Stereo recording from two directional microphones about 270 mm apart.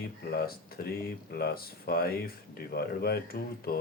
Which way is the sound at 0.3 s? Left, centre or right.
Left.